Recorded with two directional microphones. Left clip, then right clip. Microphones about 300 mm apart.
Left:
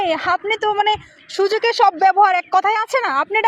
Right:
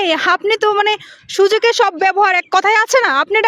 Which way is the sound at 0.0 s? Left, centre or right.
Right.